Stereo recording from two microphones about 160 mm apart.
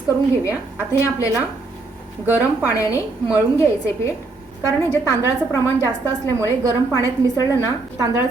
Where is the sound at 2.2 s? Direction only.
10° right (ahead or behind).